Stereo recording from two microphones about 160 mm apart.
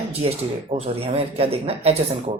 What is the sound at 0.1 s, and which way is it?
Speech, 40° right (ahead or behind).